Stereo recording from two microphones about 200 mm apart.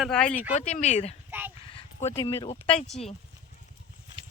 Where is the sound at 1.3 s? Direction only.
10° right (ahead or behind).